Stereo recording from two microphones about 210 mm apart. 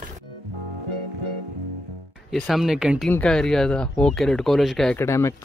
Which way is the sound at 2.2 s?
Centre (ahead or behind).